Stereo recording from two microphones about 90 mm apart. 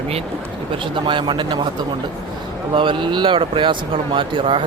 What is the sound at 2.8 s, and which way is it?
Speech, 65° right (ahead or behind).